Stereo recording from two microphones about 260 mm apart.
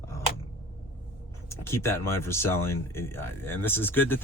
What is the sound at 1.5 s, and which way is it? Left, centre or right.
Speech, centre.